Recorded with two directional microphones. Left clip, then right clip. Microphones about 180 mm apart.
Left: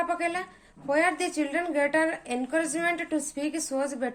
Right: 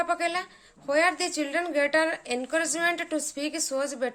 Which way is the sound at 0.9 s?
20° right (ahead or behind).